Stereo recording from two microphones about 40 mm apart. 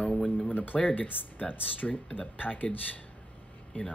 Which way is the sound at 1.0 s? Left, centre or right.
Left.